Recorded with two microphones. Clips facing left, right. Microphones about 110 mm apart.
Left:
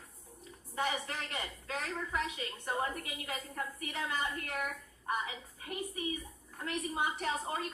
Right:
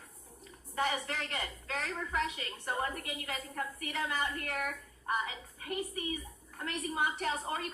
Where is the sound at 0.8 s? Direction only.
50° right (ahead or behind).